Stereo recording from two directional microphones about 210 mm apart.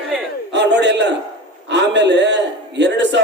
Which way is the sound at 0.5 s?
55° right (ahead or behind).